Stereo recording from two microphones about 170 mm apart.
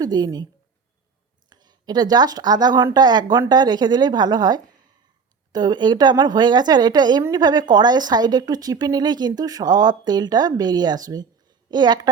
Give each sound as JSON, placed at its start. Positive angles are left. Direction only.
{"t": 0.0, "sound": "a woman's voice", "side_deg": -25}
{"t": 1.5, "sound": "a woman's voice", "side_deg": -25}